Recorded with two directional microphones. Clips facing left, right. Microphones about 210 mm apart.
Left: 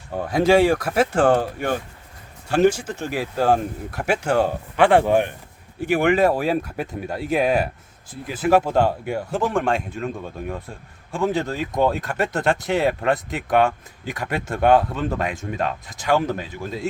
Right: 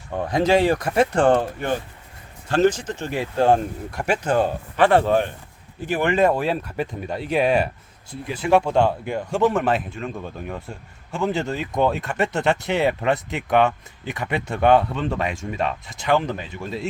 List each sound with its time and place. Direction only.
0.3 s speech: 10° left (ahead or behind)
11.1 s speech: centre (ahead or behind)